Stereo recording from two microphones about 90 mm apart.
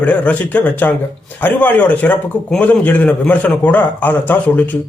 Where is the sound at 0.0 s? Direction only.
15° left (ahead or behind).